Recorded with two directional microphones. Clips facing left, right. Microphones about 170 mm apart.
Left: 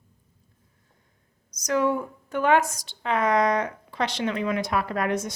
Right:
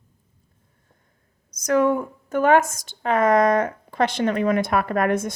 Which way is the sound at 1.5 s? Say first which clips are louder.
Right 5 dB; 55° right (ahead or behind).